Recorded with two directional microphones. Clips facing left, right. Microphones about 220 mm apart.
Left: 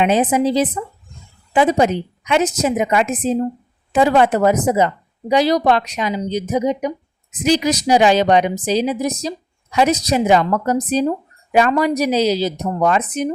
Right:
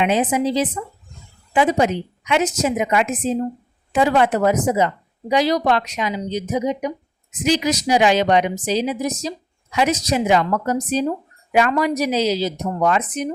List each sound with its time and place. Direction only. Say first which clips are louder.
0.0 s a woman's voice: left 3 dB; 35° left (ahead or behind)